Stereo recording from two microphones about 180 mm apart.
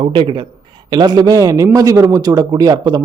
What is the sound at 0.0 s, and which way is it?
A man's voice, 30° right (ahead or behind).